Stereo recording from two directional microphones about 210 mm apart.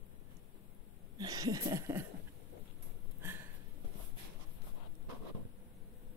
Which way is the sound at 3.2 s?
10° right (ahead or behind).